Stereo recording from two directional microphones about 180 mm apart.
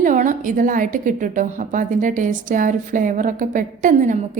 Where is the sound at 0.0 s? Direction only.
45° right (ahead or behind).